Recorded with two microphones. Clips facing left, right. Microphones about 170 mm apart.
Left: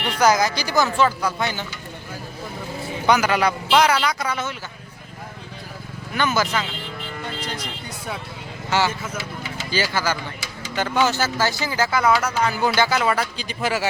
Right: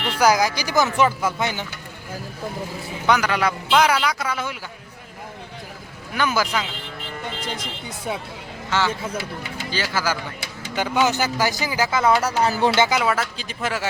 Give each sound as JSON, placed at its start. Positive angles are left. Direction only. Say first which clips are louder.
{"t": 0.2, "sound": "speech", "louder": "even", "side_deg": -10}
{"t": 3.1, "sound": "a man's voice", "louder": "left 1 dB", "side_deg": 5}
{"t": 6.1, "sound": "speech", "louder": "even", "side_deg": -5}
{"t": 9.1, "sound": "speech", "louder": "right 1 dB", "side_deg": -60}
{"t": 9.7, "sound": "a man's voice", "louder": "left 2 dB", "side_deg": 0}
{"t": 12.2, "sound": "speech", "louder": "right 2 dB", "side_deg": -35}
{"t": 13.0, "sound": "a man's voice", "louder": "left 1 dB", "side_deg": 0}